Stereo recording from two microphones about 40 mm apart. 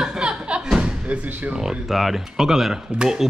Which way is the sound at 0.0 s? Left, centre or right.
Right.